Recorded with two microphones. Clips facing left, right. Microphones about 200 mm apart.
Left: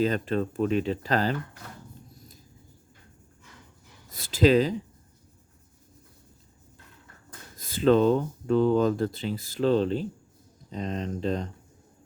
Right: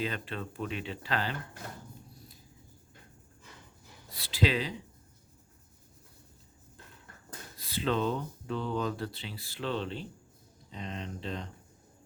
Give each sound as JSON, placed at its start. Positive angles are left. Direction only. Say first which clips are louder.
{"t": 0.0, "sound": "speech", "louder": "left 10 dB", "side_deg": 40}
{"t": 4.1, "sound": "speech", "louder": "left 10 dB", "side_deg": 45}
{"t": 7.5, "sound": "speech", "louder": "left 10 dB", "side_deg": 45}